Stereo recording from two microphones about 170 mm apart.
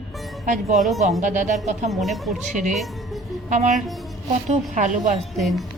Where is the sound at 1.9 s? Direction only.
Centre (ahead or behind).